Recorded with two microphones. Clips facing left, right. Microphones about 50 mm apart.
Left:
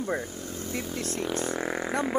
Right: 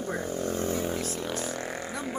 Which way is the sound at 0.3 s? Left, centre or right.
Right.